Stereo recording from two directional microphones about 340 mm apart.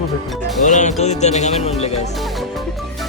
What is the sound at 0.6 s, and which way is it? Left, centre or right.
Music, left.